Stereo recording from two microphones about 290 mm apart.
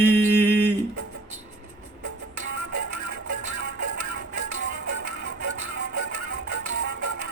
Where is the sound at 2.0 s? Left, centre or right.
Right.